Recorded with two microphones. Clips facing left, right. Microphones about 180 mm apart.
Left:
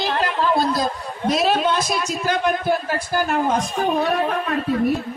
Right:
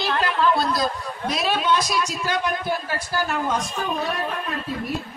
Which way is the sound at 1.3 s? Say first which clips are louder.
Left 4 dB; 40° left (ahead or behind).